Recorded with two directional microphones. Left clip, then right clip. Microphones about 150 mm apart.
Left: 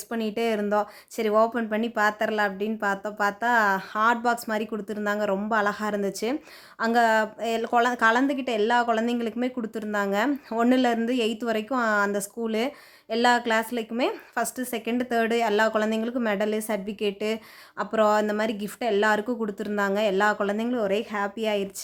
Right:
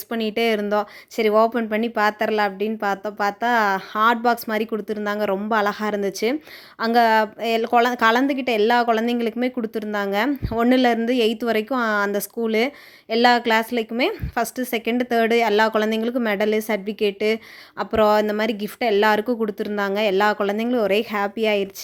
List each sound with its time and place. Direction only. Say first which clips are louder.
0.1 s a woman's voice: right 5 dB; 20° right (ahead or behind)